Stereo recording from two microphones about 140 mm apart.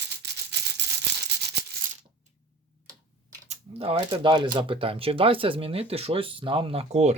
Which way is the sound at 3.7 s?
45° right (ahead or behind).